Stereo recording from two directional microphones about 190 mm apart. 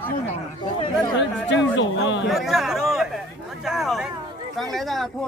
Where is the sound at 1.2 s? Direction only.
70° left (ahead or behind).